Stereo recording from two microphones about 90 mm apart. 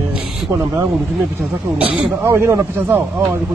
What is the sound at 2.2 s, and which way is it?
Speech, 30° right (ahead or behind).